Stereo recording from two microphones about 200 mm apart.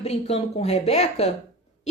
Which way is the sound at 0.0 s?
30° left (ahead or behind).